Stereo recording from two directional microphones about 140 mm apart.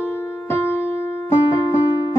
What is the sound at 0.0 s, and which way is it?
Music, 15° left (ahead or behind).